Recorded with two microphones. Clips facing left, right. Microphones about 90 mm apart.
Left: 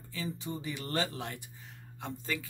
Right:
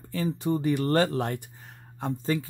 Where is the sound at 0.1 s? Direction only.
50° right (ahead or behind).